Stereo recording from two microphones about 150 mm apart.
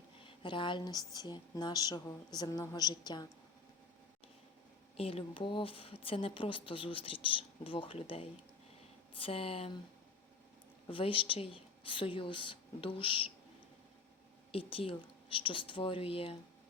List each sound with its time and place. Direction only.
0.3 s speech: 35° left (ahead or behind)
4.9 s a woman's voice: 40° left (ahead or behind)
10.8 s a woman's voice: 35° left (ahead or behind)
14.5 s a woman's voice: 35° left (ahead or behind)